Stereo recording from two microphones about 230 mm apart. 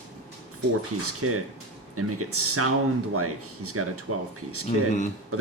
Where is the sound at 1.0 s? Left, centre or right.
Right.